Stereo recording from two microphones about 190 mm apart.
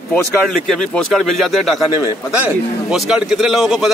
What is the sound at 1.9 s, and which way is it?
Speech, 10° right (ahead or behind).